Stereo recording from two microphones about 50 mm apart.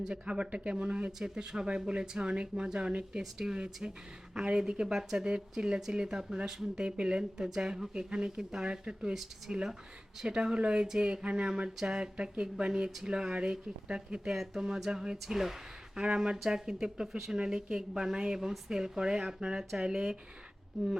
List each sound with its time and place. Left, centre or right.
0.1 s speech: right
7.9 s speech: centre